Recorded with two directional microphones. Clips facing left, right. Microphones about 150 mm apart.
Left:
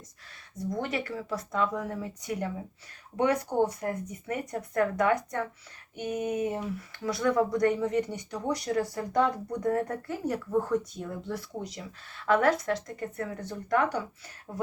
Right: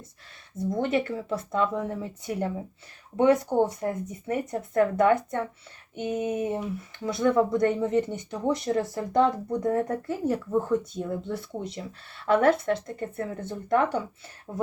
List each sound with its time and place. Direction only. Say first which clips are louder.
0.5 s speech: right 6 dB; 25° right (ahead or behind)